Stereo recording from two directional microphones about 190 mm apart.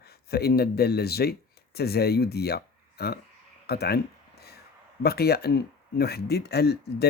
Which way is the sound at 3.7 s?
55° left (ahead or behind).